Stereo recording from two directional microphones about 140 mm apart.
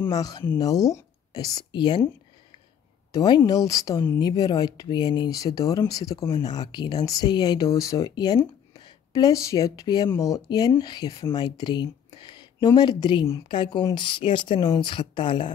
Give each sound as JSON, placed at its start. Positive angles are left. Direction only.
{"t": 0.1, "sound": "speech", "side_deg": 25}
{"t": 3.1, "sound": "speech", "side_deg": 30}